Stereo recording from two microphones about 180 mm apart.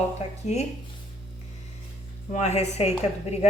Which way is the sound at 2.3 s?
40° left (ahead or behind).